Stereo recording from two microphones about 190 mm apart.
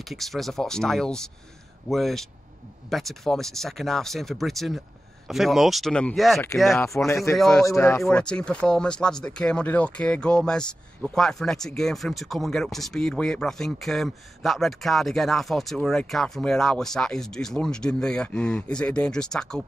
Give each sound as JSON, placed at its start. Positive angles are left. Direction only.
{"t": 0.0, "sound": "speech", "side_deg": 0}
{"t": 7.1, "sound": "speech", "side_deg": 15}
{"t": 7.3, "sound": "speech", "side_deg": 0}
{"t": 7.6, "sound": "speech", "side_deg": 15}
{"t": 8.0, "sound": "speech", "side_deg": 5}